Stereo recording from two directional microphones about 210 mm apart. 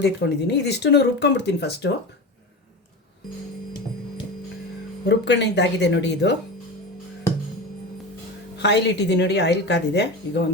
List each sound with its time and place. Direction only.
0.0 s speech: 55° left (ahead or behind)
5.0 s speech: 55° left (ahead or behind)
8.6 s speech: 55° left (ahead or behind)